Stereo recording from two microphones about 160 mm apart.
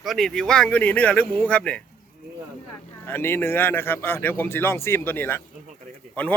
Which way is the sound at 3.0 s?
15° left (ahead or behind).